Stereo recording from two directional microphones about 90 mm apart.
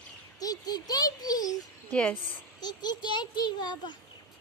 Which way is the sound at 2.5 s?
50° left (ahead or behind).